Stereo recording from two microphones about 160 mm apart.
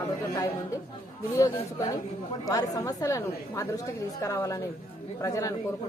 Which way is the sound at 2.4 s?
20° left (ahead or behind).